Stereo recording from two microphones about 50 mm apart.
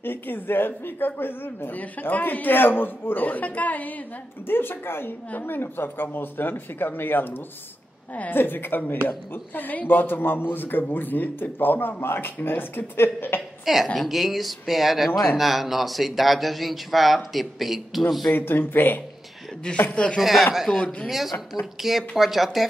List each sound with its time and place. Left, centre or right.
0.0 s speech: left
1.8 s a man's voice: left
4.5 s a man's voice: left
13.9 s speech: centre
18.3 s speech: left
19.9 s speech: left
20.2 s speech: centre
20.7 s speech: left
21.1 s speech: centre